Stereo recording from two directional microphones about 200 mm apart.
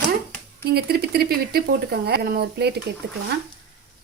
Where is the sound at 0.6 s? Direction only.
50° right (ahead or behind).